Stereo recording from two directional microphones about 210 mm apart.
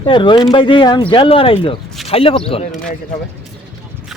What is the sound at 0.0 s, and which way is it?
Speech, 25° left (ahead or behind).